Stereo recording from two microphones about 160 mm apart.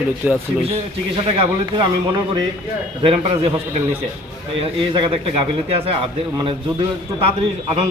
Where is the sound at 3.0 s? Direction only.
35° right (ahead or behind).